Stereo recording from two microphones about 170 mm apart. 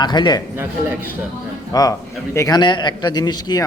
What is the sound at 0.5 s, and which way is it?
Speech, 15° right (ahead or behind).